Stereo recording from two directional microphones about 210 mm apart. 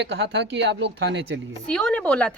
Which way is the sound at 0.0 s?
55° right (ahead or behind).